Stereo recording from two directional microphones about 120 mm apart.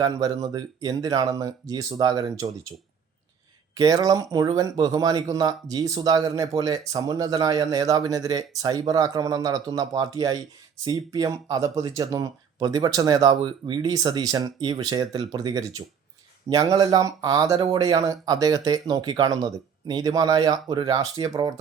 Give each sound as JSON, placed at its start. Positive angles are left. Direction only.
{"t": 0.0, "sound": "speech", "side_deg": -30}
{"t": 3.8, "sound": "speech", "side_deg": -30}